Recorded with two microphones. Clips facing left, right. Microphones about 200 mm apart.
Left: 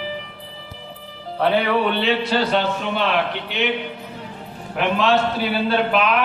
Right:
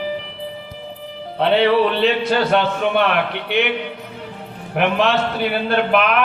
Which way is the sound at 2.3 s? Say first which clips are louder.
Right 3 dB; 55° right (ahead or behind).